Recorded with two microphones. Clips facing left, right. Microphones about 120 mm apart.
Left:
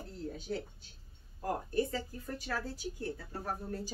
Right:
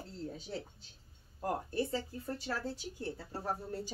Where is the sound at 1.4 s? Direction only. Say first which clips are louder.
Left 2 dB; 30° right (ahead or behind).